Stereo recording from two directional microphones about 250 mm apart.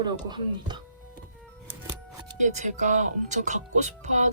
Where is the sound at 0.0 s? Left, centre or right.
Centre.